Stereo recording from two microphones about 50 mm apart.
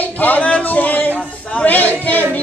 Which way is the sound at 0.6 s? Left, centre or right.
Left.